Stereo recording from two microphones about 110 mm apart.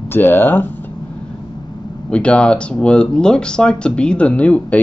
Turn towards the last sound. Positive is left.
turn(degrees=10)  # may be behind; listen again after turning